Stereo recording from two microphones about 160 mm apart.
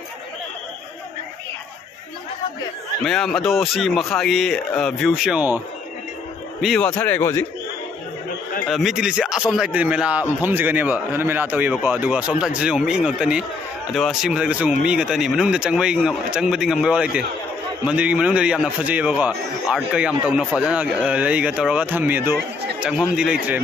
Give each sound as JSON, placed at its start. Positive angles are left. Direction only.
{"t": 3.0, "sound": "speech", "side_deg": 5}
{"t": 6.6, "sound": "speech", "side_deg": 0}
{"t": 7.0, "sound": "speech", "side_deg": 15}
{"t": 8.6, "sound": "a man's voice", "side_deg": 0}